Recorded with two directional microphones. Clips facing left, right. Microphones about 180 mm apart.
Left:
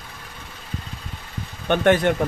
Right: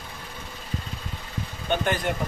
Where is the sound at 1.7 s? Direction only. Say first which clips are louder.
Left 8 dB; 70° left (ahead or behind).